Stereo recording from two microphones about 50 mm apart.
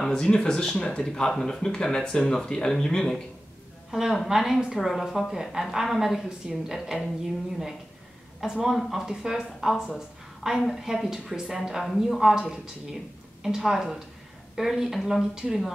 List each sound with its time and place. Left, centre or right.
0.1 s speech: centre
3.9 s a woman's voice: centre
8.4 s a woman's voice: centre